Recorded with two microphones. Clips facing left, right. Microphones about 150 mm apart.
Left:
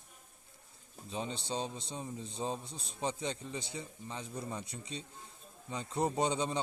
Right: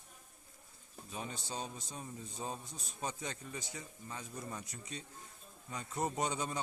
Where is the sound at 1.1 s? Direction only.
25° left (ahead or behind).